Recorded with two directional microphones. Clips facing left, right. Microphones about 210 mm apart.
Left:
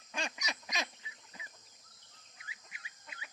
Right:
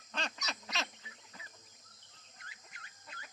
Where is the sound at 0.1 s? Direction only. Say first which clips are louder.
Left 1 dB; 10° left (ahead or behind).